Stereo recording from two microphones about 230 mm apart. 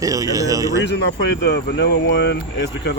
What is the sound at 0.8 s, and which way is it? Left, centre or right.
Speech, left.